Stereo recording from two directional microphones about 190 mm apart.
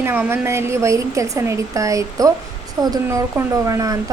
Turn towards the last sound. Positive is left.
turn(degrees=-15)  # may be behind; listen again after turning